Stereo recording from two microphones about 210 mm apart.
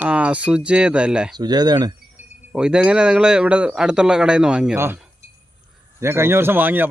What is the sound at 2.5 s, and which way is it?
A man's voice, 5° right (ahead or behind).